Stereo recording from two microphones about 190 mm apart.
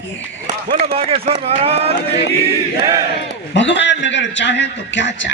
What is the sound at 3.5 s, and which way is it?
Speech, 70° left (ahead or behind).